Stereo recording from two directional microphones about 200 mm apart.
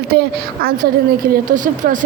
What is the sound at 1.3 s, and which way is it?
Speech, 40° right (ahead or behind).